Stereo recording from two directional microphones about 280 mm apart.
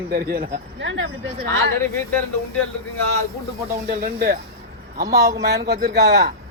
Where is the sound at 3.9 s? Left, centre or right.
Right.